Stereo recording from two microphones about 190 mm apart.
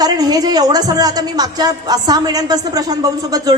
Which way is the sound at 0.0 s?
20° right (ahead or behind).